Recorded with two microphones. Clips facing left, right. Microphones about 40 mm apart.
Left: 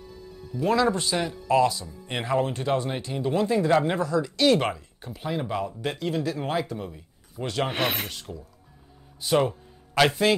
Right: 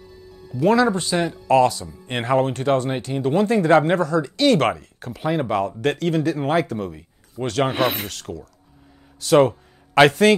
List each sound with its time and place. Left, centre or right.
0.5 s speech: centre
0.8 s speech: right
1.5 s speech: right
2.0 s speech: right
4.6 s speech: right
6.6 s speech: right
7.4 s speech: centre
8.1 s speech: right
10.0 s speech: right